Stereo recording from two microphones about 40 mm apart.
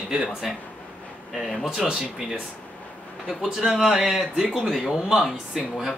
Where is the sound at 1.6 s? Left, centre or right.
Right.